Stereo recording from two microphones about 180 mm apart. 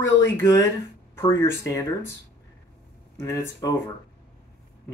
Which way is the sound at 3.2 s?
20° left (ahead or behind).